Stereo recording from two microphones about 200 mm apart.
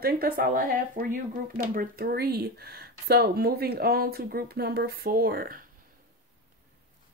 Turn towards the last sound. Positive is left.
turn(degrees=-45)  # may be behind; listen again after turning